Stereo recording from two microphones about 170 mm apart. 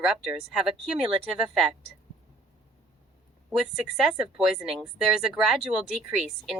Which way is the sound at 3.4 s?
Centre (ahead or behind).